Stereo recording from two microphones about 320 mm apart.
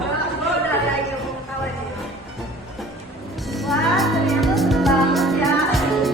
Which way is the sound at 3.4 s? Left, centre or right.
Centre.